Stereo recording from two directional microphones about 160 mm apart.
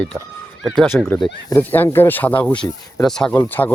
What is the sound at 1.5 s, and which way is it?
Speech, 10° left (ahead or behind).